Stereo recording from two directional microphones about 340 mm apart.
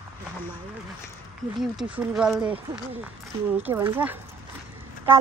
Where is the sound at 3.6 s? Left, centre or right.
Centre.